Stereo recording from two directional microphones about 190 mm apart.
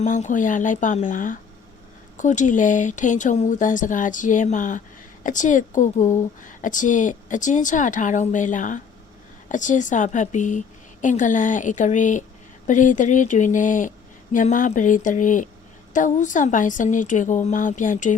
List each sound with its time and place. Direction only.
0.0 s speech: 40° left (ahead or behind)